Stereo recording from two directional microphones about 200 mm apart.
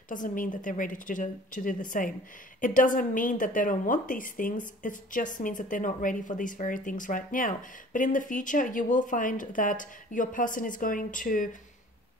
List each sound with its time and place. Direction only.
0.1 s a woman's voice: 40° left (ahead or behind)